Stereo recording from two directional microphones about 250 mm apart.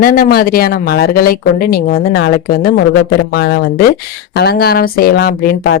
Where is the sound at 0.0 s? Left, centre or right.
Left.